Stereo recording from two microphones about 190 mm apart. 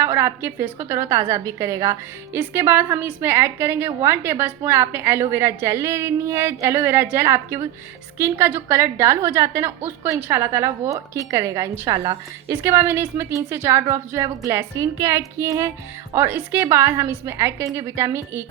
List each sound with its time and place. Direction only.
0.0 s a woman's voice: 15° right (ahead or behind)